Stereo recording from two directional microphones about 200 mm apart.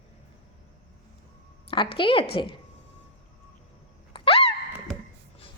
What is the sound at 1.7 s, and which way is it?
Speech, 25° left (ahead or behind).